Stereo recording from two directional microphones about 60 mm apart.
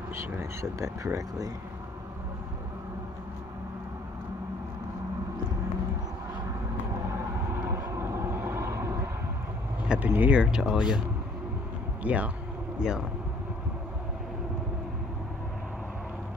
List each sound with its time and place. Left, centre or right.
0.1 s speech: right
7.5 s vehicle: right
8.4 s boat: right
9.8 s speech: right
10.6 s speech: centre
12.0 s speech: right
12.8 s speech: centre